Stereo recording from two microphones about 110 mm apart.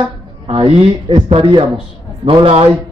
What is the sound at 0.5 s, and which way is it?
Speech, 65° right (ahead or behind).